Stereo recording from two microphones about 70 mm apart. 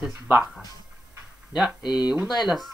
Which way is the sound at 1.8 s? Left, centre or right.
Left.